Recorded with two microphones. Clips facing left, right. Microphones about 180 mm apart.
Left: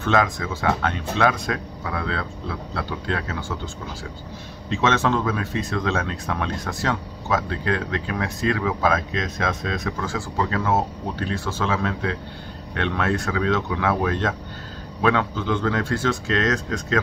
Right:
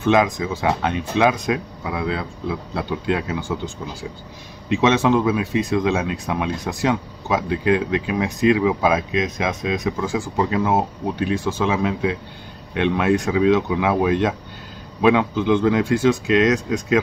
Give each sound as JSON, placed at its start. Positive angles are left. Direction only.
{"t": 0.0, "sound": "speech", "side_deg": -15}